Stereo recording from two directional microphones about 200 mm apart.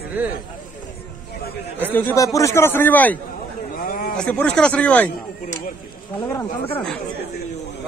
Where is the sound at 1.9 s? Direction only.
15° left (ahead or behind).